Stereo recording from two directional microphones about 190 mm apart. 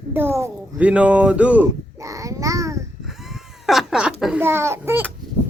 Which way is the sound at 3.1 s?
Centre (ahead or behind).